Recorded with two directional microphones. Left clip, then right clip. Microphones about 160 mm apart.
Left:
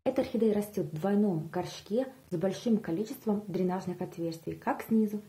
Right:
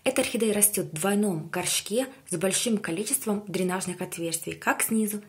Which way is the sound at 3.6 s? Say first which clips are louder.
Right 4 dB; 20° right (ahead or behind).